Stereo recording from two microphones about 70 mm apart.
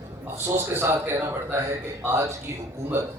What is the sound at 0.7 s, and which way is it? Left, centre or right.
Speech, right.